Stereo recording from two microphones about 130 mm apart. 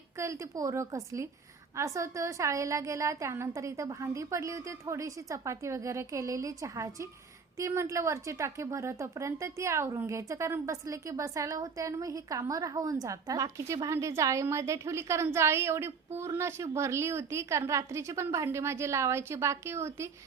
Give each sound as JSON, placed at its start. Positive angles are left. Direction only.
{"t": 0.2, "sound": "a woman's voice", "side_deg": -25}